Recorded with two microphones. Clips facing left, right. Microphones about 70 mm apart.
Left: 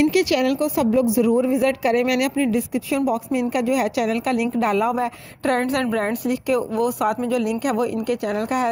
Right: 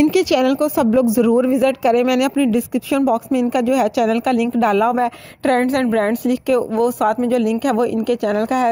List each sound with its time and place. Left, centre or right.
3.1 s a woman's voice: right
4.9 s speech: right
5.9 s speech: right
7.1 s speech: right
8.1 s a woman's voice: right